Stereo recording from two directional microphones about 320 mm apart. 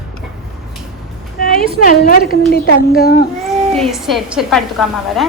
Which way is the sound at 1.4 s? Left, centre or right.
Left.